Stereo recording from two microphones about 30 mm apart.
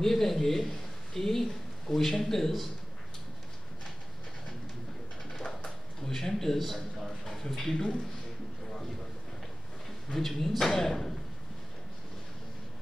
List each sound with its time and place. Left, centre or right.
0.0 s a man's voice: centre
6.0 s a man's voice: centre
6.6 s a sound: centre
7.4 s a man's voice: centre
7.7 s a man's voice: left
10.1 s a man's voice: centre